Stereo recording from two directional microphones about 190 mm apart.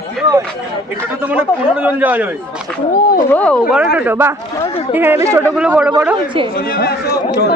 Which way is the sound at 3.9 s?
10° right (ahead or behind).